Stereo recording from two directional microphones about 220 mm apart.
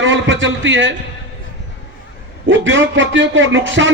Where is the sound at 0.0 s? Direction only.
60° right (ahead or behind).